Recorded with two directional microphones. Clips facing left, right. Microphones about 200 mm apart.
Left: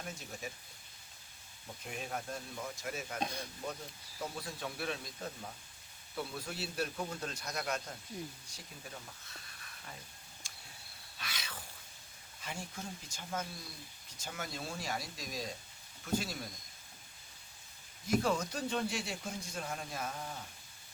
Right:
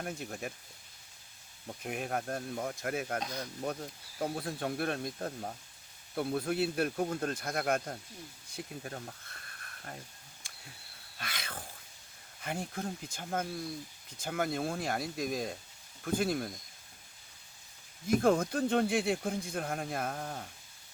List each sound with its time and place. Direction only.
0.0 s speech: 60° right (ahead or behind)
1.6 s speech: 60° right (ahead or behind)
10.4 s a sound: 55° right (ahead or behind)
12.4 s speech: 55° right (ahead or behind)
18.1 s speech: 55° right (ahead or behind)